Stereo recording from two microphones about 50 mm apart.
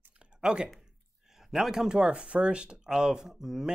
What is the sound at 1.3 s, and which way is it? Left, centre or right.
Speech, centre.